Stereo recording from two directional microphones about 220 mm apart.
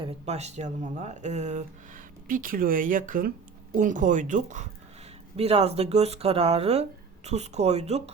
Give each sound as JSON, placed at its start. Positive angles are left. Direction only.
{"t": 0.0, "sound": "speech", "side_deg": -30}